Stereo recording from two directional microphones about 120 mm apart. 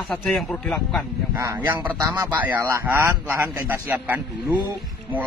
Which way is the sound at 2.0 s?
30° right (ahead or behind).